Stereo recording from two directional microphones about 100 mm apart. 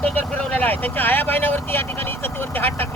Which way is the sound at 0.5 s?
15° left (ahead or behind).